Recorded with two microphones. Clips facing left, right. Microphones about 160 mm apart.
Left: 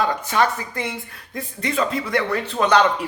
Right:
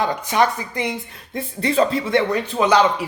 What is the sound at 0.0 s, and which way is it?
A woman's voice, 15° right (ahead or behind).